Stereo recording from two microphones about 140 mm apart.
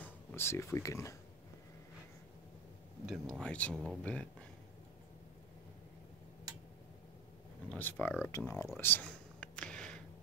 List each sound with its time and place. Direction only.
0.0 s speech: 15° left (ahead or behind)
3.1 s speech: 5° left (ahead or behind)
7.7 s speech: 10° left (ahead or behind)
8.3 s speech: 20° left (ahead or behind)
8.7 s a sound: 15° left (ahead or behind)